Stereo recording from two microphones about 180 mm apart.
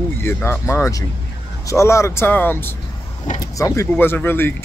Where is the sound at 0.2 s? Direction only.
10° left (ahead or behind).